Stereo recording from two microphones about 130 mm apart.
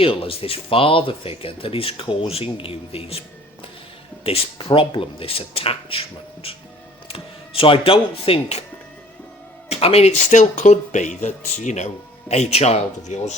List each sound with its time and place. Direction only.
0.0 s speech: 45° left (ahead or behind)
9.6 s speech: 50° left (ahead or behind); by 11.9 s 65° left (ahead or behind)
12.3 s speech: 55° left (ahead or behind)